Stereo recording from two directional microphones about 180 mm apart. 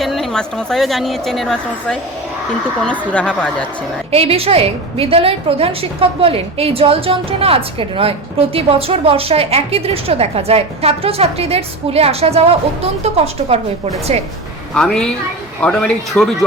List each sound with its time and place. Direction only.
0.0 s a woman's voice: centre (ahead or behind)
3.1 s a woman's voice: 5° left (ahead or behind)
4.1 s a woman's voice: 35° right (ahead or behind)
14.8 s a woman's voice: 5° left (ahead or behind)